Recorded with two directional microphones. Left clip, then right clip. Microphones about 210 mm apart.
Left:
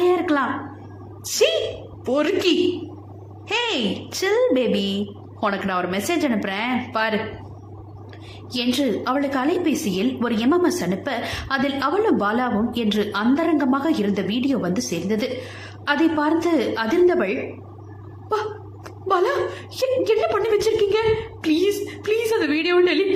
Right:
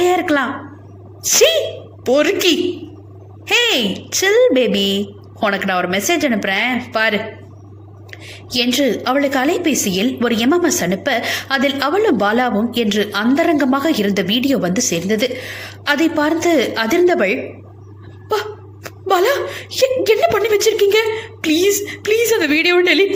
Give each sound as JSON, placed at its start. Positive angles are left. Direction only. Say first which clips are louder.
{"t": 0.0, "sound": "a sound", "louder": "right 4 dB", "side_deg": -10}
{"t": 1.2, "sound": "a woman's voice", "louder": "right 7 dB", "side_deg": -15}
{"t": 8.3, "sound": "a woman's voice", "louder": "right 7 dB", "side_deg": -15}
{"t": 18.9, "sound": "a woman's voice", "louder": "right 5 dB", "side_deg": -15}